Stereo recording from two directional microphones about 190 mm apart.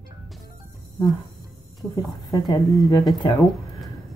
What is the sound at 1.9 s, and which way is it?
A woman's voice, 20° left (ahead or behind).